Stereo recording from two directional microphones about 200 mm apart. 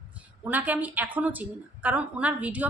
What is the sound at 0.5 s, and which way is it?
Speech, 10° right (ahead or behind).